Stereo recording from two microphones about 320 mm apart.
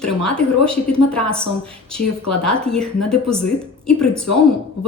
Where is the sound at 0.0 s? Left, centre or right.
Centre.